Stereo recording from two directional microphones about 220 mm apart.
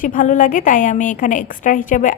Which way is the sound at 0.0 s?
35° left (ahead or behind).